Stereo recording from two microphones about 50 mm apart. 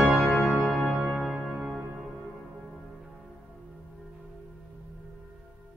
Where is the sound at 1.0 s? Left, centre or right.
Centre.